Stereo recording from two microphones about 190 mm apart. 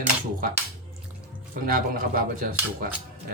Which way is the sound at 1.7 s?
50° right (ahead or behind).